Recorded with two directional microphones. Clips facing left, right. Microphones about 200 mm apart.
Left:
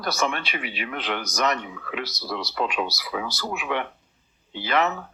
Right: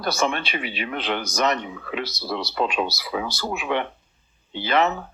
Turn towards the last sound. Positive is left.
turn(degrees=-25)  # may be behind; listen again after turning